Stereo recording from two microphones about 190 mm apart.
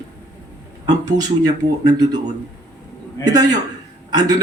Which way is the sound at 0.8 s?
20° right (ahead or behind).